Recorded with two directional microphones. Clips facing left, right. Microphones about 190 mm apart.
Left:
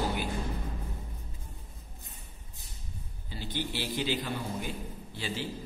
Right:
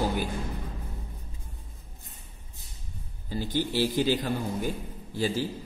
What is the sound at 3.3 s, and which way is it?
A man's voice, 45° right (ahead or behind).